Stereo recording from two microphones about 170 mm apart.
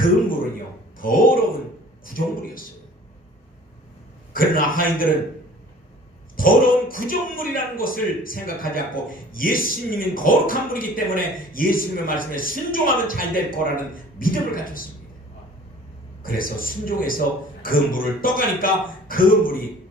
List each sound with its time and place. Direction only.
0.9 s speech: 55° left (ahead or behind)
4.3 s speech: 55° left (ahead or behind)
6.3 s speech: 55° left (ahead or behind)
16.2 s speech: 55° left (ahead or behind)